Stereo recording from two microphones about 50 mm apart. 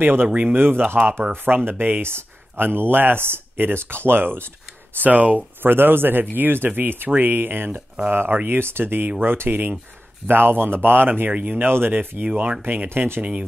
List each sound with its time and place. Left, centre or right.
0.0 s speech: right
0.3 s speech: right
0.6 s speech: right
5.0 s speech: right
5.6 s speech: right
8.5 s speech: right
13.2 s speech: right